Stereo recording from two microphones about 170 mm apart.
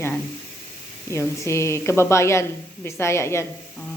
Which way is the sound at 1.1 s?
15° left (ahead or behind).